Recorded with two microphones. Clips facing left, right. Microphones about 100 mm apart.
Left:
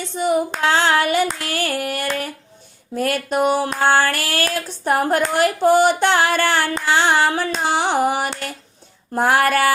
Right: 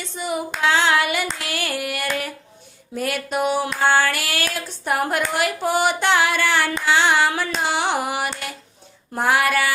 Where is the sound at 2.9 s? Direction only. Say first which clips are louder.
Left 4 dB; 40° left (ahead or behind).